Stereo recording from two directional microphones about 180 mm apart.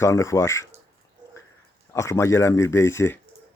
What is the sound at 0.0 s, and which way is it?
Speech, 15° left (ahead or behind).